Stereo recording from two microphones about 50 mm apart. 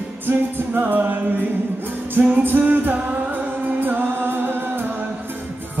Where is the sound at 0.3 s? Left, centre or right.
Right.